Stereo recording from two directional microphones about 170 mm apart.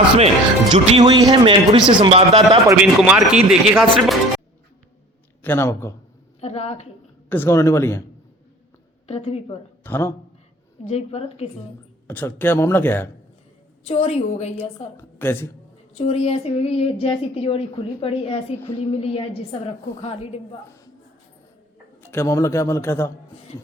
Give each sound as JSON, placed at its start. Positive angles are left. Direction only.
{"t": 0.7, "sound": "speech", "side_deg": -30}
{"t": 2.8, "sound": "speech", "side_deg": -5}
{"t": 5.4, "sound": "a man's voice", "side_deg": 15}
{"t": 6.4, "sound": "a woman's voice", "side_deg": 40}
{"t": 7.3, "sound": "a man's voice", "side_deg": 15}
{"t": 9.0, "sound": "a woman's voice", "side_deg": 40}
{"t": 9.8, "sound": "a man's voice", "side_deg": 15}
{"t": 10.8, "sound": "a woman's voice", "side_deg": 40}
{"t": 12.0, "sound": "a man's voice", "side_deg": 10}
{"t": 13.8, "sound": "a woman's voice", "side_deg": 40}
{"t": 14.9, "sound": "a woman's voice", "side_deg": 15}
{"t": 16.0, "sound": "a woman's voice", "side_deg": 35}
{"t": 22.0, "sound": "a man's voice", "side_deg": 15}